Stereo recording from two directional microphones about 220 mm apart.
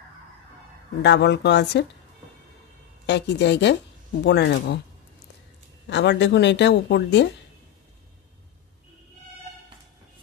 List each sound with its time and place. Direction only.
1.0 s a woman's voice: 50° left (ahead or behind)
3.1 s a woman's voice: 50° left (ahead or behind)
5.9 s a woman's voice: 50° left (ahead or behind)